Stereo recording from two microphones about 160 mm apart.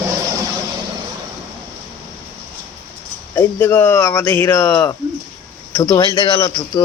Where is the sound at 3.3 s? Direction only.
15° left (ahead or behind).